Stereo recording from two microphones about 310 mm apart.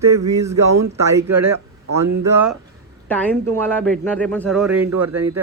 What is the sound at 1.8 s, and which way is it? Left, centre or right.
Speech, right.